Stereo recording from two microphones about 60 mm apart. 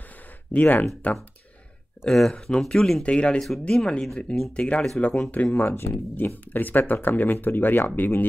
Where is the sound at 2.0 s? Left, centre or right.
Centre.